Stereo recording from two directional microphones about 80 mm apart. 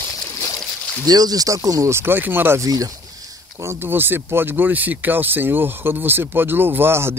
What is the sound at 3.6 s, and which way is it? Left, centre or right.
Speech, right.